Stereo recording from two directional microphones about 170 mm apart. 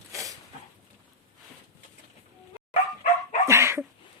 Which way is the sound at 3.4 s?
15° right (ahead or behind).